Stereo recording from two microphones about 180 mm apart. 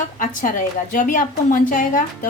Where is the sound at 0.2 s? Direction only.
45° left (ahead or behind).